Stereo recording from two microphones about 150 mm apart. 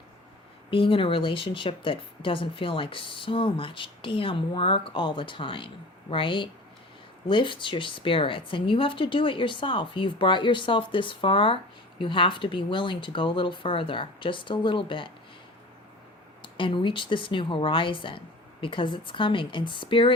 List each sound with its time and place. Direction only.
0.7 s a woman's voice: 35° left (ahead or behind)
16.4 s a woman's voice: 35° left (ahead or behind)